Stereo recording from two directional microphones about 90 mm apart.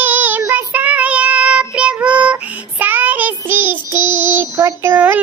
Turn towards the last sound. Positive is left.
turn(degrees=-15)  # may be behind; listen again after turning